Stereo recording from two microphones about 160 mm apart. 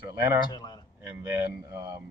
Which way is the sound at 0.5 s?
25° left (ahead or behind).